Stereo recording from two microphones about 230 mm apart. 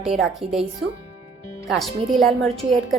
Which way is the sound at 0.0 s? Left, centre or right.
Centre.